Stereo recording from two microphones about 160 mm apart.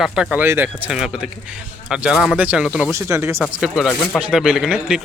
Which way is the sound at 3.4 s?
Centre (ahead or behind).